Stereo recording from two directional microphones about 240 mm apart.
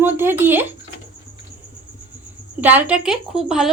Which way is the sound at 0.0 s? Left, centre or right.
Centre.